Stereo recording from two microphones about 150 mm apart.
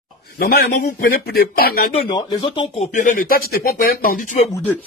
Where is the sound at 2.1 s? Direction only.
30° left (ahead or behind).